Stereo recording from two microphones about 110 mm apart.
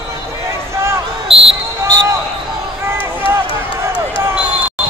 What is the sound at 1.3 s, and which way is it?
Speech, 60° right (ahead or behind).